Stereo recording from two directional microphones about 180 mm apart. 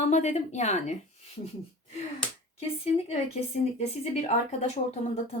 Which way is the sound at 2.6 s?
35° left (ahead or behind).